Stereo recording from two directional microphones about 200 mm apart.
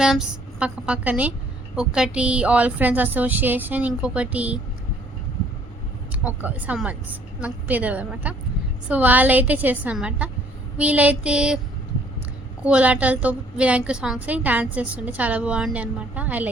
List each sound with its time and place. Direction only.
0.0 s a woman's voice: 5° right (ahead or behind)
6.4 s a woman's voice: 5° right (ahead or behind)
12.6 s a woman's voice: 5° right (ahead or behind)